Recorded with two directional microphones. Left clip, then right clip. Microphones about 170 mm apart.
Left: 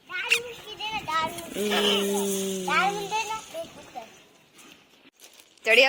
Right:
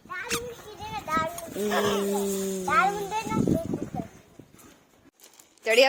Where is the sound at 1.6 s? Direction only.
10° right (ahead or behind).